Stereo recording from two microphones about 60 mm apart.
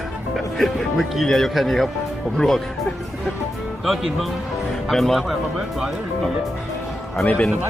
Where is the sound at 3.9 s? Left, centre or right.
Centre.